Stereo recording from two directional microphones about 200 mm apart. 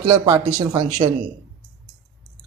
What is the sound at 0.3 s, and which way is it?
Speech, 20° right (ahead or behind).